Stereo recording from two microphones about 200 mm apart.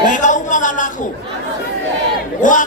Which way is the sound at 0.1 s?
40° left (ahead or behind).